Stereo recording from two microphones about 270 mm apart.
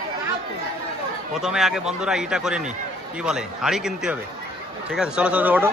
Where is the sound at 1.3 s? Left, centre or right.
Centre.